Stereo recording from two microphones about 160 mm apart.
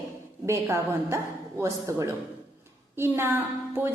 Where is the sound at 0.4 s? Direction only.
15° right (ahead or behind).